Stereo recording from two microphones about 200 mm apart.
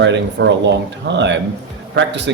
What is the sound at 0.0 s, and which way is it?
Speech, 65° right (ahead or behind).